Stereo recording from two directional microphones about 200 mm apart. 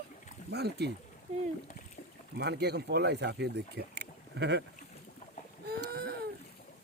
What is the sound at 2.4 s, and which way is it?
Speech, 55° right (ahead or behind).